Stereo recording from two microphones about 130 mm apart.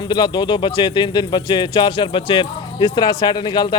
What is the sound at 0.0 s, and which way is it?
Speech, 35° left (ahead or behind).